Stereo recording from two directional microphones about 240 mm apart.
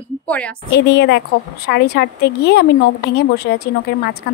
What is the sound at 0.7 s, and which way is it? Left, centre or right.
A woman's voice, left.